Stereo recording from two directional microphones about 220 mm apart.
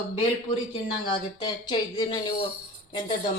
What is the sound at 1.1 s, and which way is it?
A woman's voice, 20° left (ahead or behind).